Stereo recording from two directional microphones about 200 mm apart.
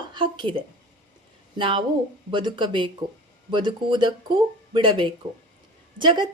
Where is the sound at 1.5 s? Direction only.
25° right (ahead or behind).